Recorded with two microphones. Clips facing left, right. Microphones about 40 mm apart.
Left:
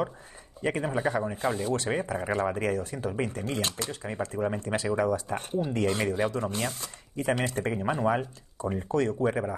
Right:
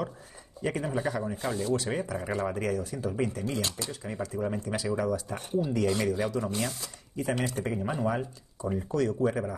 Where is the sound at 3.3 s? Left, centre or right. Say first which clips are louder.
Left 1 dB; left.